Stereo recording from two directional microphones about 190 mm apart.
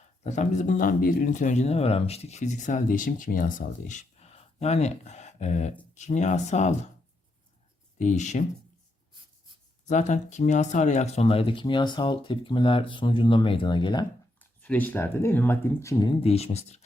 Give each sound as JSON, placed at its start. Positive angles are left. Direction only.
{"t": 0.3, "sound": "speech", "side_deg": 40}
{"t": 7.9, "sound": "speech", "side_deg": 40}
{"t": 9.8, "sound": "speech", "side_deg": 40}
{"t": 14.6, "sound": "speech", "side_deg": 10}